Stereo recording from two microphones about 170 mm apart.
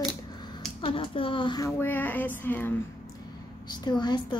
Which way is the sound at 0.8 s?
30° left (ahead or behind).